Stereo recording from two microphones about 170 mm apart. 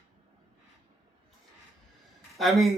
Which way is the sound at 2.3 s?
Centre (ahead or behind).